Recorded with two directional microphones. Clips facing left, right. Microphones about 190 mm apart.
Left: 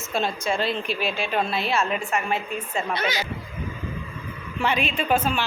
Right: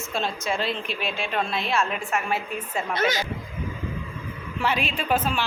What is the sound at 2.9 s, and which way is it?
Speech, 45° right (ahead or behind).